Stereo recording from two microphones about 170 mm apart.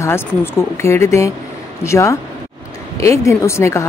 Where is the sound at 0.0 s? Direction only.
15° left (ahead or behind).